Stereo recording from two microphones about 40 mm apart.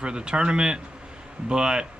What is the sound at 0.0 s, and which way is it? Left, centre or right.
Speech, right.